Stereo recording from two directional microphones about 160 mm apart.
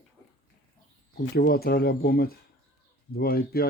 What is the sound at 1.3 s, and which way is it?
Speech, 70° left (ahead or behind).